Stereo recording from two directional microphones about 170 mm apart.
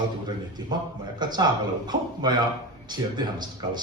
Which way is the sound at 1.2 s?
25° right (ahead or behind).